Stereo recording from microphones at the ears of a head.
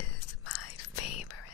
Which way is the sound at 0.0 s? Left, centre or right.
Left.